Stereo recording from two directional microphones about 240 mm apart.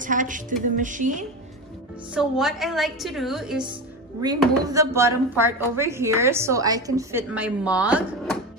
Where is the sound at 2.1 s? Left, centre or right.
Centre.